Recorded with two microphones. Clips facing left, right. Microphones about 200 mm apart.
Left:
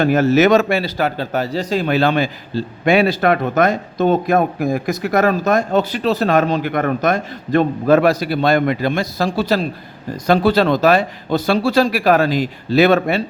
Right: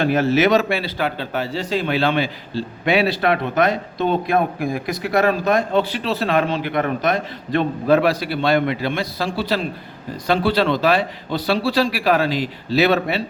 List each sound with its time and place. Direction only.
0.0 s a man's voice: 45° left (ahead or behind)